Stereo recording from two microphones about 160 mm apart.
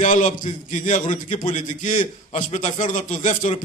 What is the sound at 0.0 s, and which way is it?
A man's voice, 50° left (ahead or behind).